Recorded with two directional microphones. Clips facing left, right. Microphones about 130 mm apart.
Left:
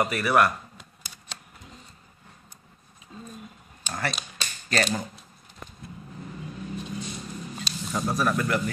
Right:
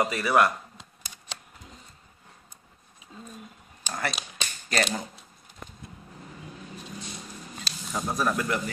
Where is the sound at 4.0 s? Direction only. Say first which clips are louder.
Even; 20° right (ahead or behind).